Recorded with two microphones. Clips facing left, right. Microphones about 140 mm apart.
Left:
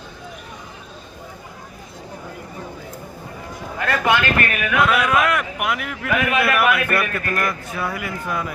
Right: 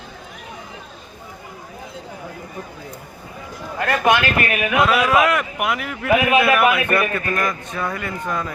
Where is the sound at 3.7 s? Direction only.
40° right (ahead or behind).